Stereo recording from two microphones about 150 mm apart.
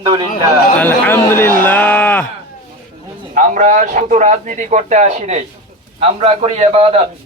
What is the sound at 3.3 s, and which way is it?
A man's voice, 55° right (ahead or behind).